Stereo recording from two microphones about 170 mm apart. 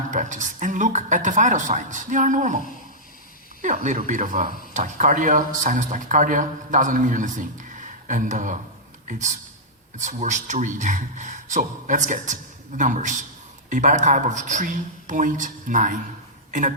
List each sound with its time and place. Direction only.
0.1 s speech: 45° right (ahead or behind)